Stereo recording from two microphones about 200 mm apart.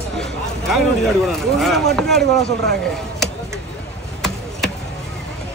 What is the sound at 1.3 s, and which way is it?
Speech, centre (ahead or behind).